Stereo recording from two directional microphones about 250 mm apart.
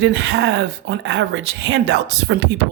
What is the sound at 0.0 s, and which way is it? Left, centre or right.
Speech, right.